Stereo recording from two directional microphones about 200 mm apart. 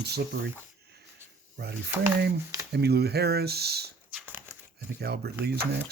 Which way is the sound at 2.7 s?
55° right (ahead or behind).